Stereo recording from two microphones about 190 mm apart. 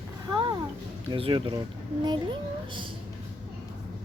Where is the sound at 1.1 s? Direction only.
30° right (ahead or behind).